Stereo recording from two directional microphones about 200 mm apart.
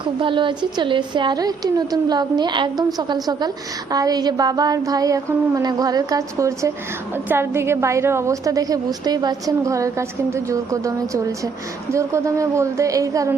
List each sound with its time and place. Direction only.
0.0 s a woman's voice: 25° right (ahead or behind)